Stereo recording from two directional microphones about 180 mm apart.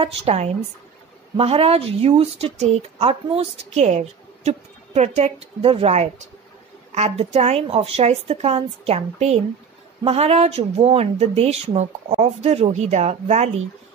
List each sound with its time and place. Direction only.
0.0 s speech: 35° right (ahead or behind)